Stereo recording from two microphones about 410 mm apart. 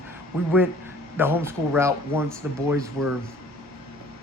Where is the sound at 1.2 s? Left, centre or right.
Centre.